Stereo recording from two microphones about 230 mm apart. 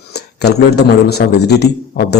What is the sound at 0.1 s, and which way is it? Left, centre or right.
A man's voice, left.